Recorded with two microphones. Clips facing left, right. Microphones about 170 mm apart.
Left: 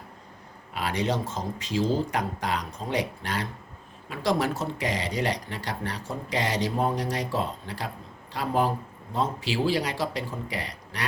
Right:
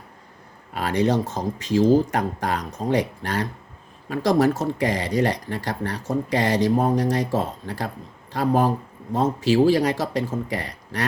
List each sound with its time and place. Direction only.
0.7 s speech: 45° right (ahead or behind)